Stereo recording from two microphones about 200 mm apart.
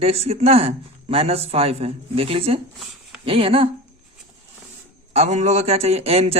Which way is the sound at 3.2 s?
30° right (ahead or behind).